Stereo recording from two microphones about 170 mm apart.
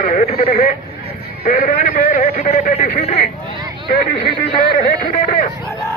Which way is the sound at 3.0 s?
35° left (ahead or behind).